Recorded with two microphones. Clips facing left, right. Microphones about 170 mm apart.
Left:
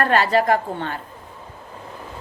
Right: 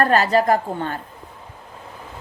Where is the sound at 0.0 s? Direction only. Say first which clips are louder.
Right 1 dB; 40° right (ahead or behind).